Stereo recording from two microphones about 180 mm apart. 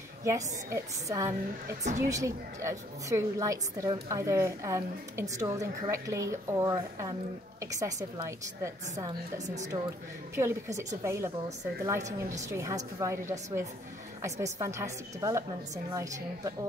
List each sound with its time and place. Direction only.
0.2 s a woman's voice: 15° right (ahead or behind)
10.3 s a woman's voice: 15° right (ahead or behind)